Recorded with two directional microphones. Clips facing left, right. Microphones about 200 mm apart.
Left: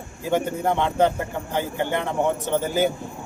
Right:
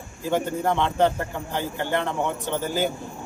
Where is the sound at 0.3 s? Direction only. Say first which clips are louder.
Left 1 dB; 15° left (ahead or behind).